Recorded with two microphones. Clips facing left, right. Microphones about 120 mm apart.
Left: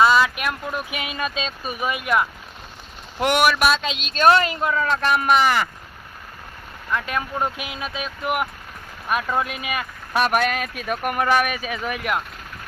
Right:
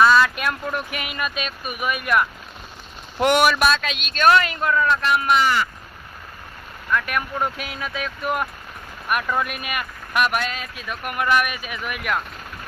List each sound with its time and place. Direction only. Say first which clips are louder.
0.0 s a sound: right 1 dB; 15° left (ahead or behind)
0.9 s speech: left 1 dB; 20° left (ahead or behind)
3.2 s speech: right 1 dB; 5° left (ahead or behind)
3.8 s speech: left 1 dB; 25° left (ahead or behind)
5.0 s speech: left 1 dB; 45° left (ahead or behind)
6.9 s speech: right 1 dB; 25° left (ahead or behind)
10.2 s speech: left 4 dB; 50° left (ahead or behind); by 11.9 s 35° left (ahead or behind)